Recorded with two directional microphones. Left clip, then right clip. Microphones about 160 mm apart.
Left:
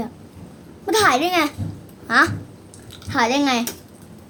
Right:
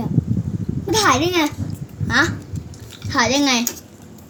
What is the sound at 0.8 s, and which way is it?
Babbling, 20° left (ahead or behind).